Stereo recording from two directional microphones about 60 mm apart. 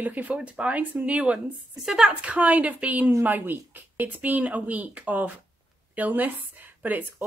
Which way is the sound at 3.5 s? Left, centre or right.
Right.